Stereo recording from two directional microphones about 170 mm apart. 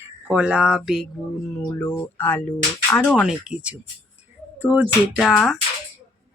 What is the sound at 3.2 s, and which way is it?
Speech, 5° right (ahead or behind).